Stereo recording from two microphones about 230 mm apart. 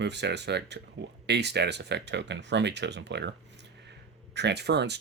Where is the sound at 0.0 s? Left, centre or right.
Right.